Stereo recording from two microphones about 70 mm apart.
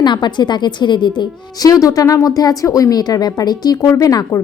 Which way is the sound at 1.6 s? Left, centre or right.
Left.